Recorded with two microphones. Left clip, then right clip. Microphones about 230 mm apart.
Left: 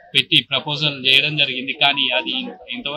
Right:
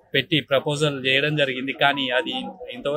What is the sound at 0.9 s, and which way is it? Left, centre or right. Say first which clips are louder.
Speech: left 5 dB; centre.